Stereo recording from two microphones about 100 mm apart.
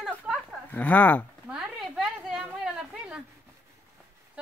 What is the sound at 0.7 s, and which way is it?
Speech, 15° left (ahead or behind).